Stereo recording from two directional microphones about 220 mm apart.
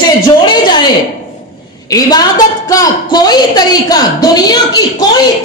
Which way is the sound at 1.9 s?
15° left (ahead or behind).